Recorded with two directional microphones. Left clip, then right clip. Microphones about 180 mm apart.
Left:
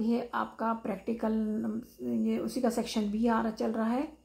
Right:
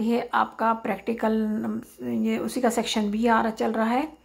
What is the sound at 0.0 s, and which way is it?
Speech, 20° right (ahead or behind).